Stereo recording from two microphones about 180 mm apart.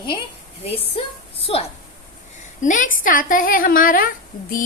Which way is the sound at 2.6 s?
45° left (ahead or behind).